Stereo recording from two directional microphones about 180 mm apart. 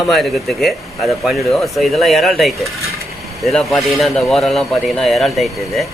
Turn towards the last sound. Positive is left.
turn(degrees=0)  # may be behind; listen again after turning